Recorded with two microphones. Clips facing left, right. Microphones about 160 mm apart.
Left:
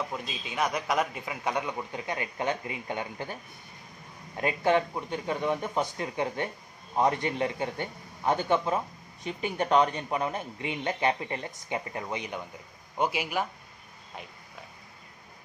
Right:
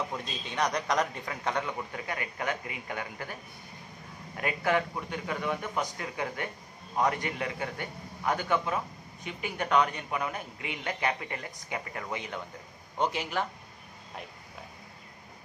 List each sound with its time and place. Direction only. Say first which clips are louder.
0.1 s a man's voice: left 1 dB; 5° left (ahead or behind); by 3.3 s 25° left (ahead or behind)
4.4 s a man's voice: left 3 dB; 25° left (ahead or behind); by 13.5 s 10° left (ahead or behind)